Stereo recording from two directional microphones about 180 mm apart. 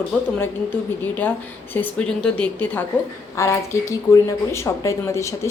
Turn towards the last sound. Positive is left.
turn(degrees=15)  # may be behind; listen again after turning